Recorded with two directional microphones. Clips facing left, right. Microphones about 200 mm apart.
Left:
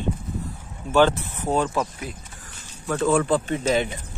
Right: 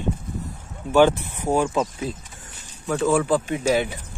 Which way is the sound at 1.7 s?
25° right (ahead or behind).